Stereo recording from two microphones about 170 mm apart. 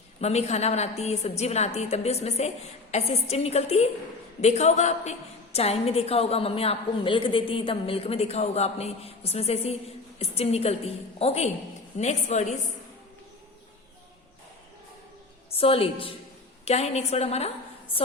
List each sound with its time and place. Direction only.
0.2 s a woman's voice: 40° left (ahead or behind)
15.5 s a woman's voice: 35° left (ahead or behind)